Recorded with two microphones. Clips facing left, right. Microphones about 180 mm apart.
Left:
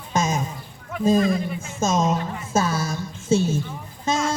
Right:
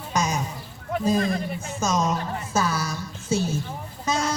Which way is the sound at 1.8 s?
25° left (ahead or behind).